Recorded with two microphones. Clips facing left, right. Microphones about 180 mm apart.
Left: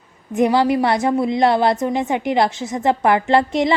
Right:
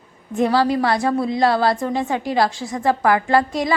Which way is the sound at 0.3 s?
20° left (ahead or behind).